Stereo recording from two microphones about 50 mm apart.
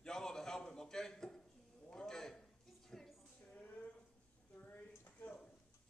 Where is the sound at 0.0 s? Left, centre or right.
Centre.